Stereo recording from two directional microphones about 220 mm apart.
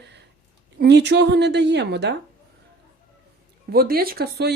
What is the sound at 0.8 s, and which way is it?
A woman's voice, 50° right (ahead or behind).